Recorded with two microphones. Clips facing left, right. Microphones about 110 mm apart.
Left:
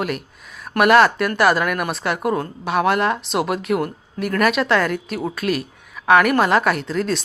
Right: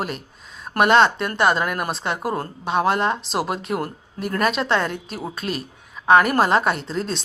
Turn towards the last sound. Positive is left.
turn(degrees=-30)  # may be behind; listen again after turning